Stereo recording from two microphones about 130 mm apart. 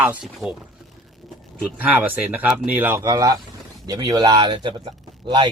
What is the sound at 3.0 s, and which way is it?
Speech, 25° right (ahead or behind).